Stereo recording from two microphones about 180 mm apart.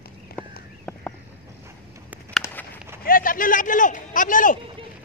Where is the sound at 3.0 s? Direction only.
50° left (ahead or behind).